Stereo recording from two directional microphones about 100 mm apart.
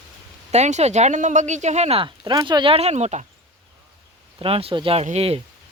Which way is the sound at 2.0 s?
50° right (ahead or behind).